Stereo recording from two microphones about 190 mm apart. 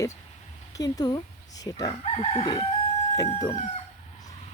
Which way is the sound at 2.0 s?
35° left (ahead or behind).